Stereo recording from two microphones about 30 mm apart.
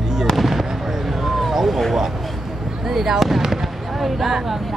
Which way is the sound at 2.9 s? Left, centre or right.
Centre.